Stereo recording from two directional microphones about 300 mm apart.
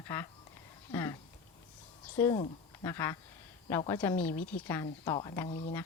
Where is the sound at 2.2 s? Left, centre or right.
Centre.